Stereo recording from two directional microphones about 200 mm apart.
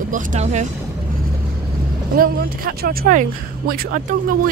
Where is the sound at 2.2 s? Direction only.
45° right (ahead or behind).